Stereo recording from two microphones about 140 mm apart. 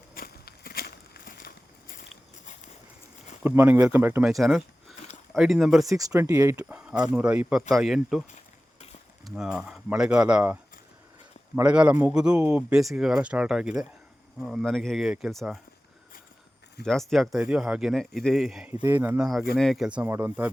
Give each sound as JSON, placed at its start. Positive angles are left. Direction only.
{"t": 0.1, "sound": "a sound", "side_deg": 90}
{"t": 3.4, "sound": "a man's voice", "side_deg": -15}
{"t": 4.3, "sound": "speech", "side_deg": 0}
{"t": 5.8, "sound": "speech", "side_deg": -25}
{"t": 6.7, "sound": "speech", "side_deg": -5}
{"t": 9.2, "sound": "speech", "side_deg": -5}
{"t": 11.6, "sound": "a man's voice", "side_deg": -10}
{"t": 16.8, "sound": "speech", "side_deg": 5}
{"t": 18.9, "sound": "a man's voice", "side_deg": -15}
{"t": 19.5, "sound": "speech", "side_deg": 0}
{"t": 20.1, "sound": "speech", "side_deg": -20}